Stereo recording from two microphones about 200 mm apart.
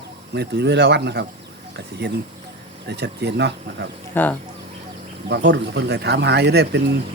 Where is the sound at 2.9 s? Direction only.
55° right (ahead or behind).